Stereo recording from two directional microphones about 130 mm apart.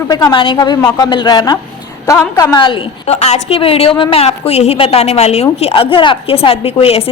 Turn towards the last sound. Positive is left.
turn(degrees=50)  # may be behind; listen again after turning